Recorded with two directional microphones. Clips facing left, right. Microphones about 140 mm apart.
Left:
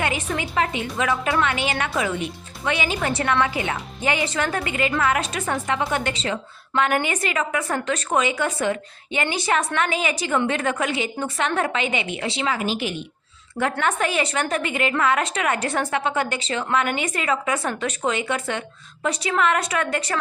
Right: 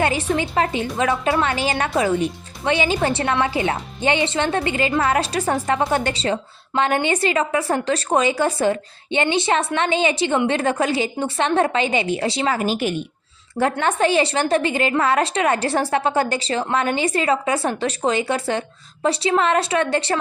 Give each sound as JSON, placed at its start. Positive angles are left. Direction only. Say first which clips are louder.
{"t": 0.0, "sound": "a woman's voice", "louder": "right 5 dB", "side_deg": -30}
{"t": 13.6, "sound": "a woman's voice", "louder": "right 4 dB", "side_deg": -35}